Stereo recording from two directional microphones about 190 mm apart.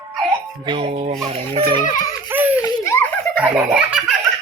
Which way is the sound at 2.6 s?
15° left (ahead or behind).